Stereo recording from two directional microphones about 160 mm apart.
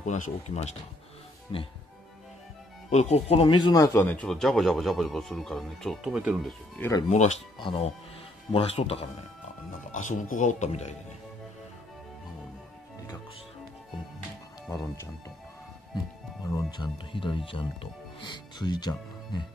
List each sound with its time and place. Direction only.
0.0 s speech: 50° left (ahead or behind)
1.5 s speech: 30° left (ahead or behind)
2.9 s speech: 45° left (ahead or behind); by 6.5 s 5° right (ahead or behind)
7.1 s speech: 45° left (ahead or behind)
7.5 s speech: 30° left (ahead or behind)
9.9 s speech: 50° left (ahead or behind)
16.4 s speech: 25° left (ahead or behind)